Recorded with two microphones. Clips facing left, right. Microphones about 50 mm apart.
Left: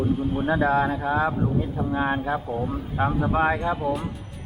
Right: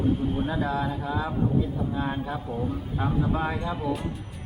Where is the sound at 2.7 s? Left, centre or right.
Left.